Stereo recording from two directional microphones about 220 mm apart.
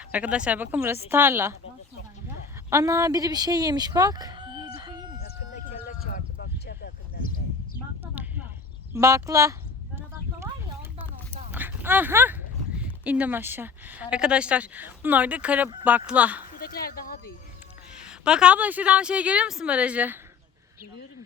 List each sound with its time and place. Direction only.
0.1 s speech: 5° right (ahead or behind)
2.6 s speech: 15° right (ahead or behind)
5.9 s a sound: 45° left (ahead or behind)
8.1 s a sound: 5° right (ahead or behind)
11.5 s speech: 10° right (ahead or behind)
16.6 s speech: 40° left (ahead or behind)
17.9 s a woman's voice: 5° right (ahead or behind)